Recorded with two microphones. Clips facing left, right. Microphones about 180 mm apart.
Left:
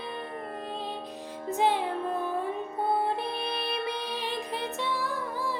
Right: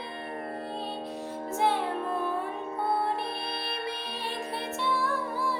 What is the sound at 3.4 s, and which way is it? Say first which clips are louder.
Music: left 3 dB; 15° left (ahead or behind).